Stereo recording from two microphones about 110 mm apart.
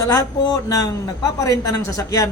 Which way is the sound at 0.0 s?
35° left (ahead or behind).